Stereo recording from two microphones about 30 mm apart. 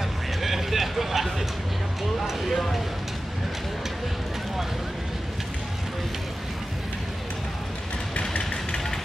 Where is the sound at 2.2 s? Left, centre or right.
Centre.